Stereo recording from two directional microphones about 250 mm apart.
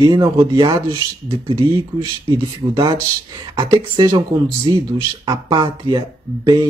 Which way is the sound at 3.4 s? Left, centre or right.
Centre.